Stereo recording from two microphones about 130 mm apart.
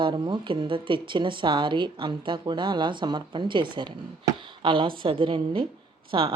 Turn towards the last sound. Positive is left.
turn(degrees=-45)  # may be behind; listen again after turning